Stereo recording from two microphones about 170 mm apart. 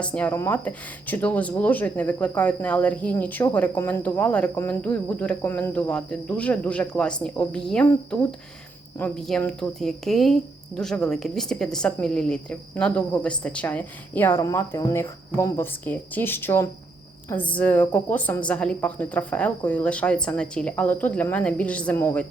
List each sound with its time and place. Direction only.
0.0 s speech: 5° left (ahead or behind)